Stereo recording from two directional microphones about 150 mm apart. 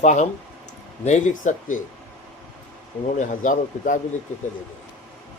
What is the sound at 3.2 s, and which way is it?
Speech, 60° left (ahead or behind).